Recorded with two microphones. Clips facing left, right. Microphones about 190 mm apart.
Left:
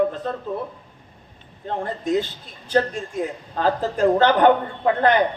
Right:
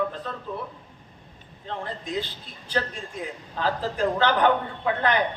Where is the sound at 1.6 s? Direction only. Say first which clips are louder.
Left 8 dB; 50° left (ahead or behind).